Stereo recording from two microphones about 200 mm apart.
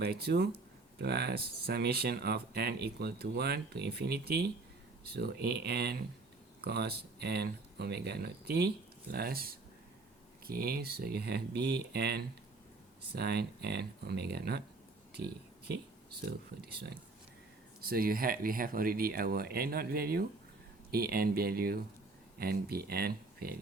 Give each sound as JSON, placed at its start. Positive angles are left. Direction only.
{"t": 0.0, "sound": "speech", "side_deg": -50}
{"t": 16.2, "sound": "speech", "side_deg": -55}